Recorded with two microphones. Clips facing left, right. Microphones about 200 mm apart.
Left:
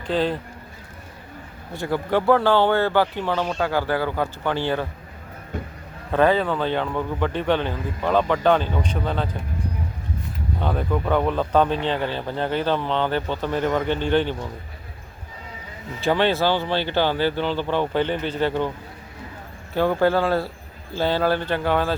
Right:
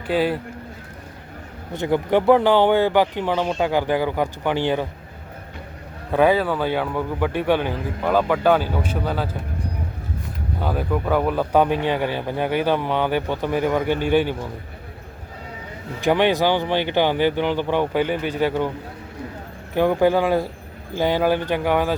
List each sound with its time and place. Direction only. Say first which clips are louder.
0.1 s speech: right 2 dB; 10° right (ahead or behind)
1.7 s speech: right 3 dB; 20° right (ahead or behind)
6.1 s speech: right 1 dB; 10° right (ahead or behind)
10.6 s speech: right 1 dB; 5° right (ahead or behind)
16.0 s speech: right 2 dB; 15° right (ahead or behind)
19.7 s speech: right 2 dB; 15° right (ahead or behind)